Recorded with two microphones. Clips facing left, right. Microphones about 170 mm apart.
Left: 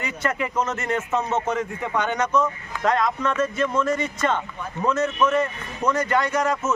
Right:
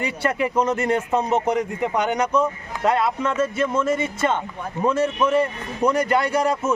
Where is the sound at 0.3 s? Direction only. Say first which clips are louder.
Right 5 dB; 30° right (ahead or behind).